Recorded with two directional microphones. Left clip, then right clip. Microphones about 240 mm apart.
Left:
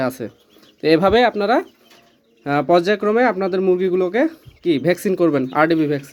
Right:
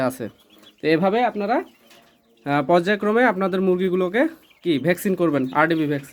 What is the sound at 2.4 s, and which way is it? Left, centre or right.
Speech, centre.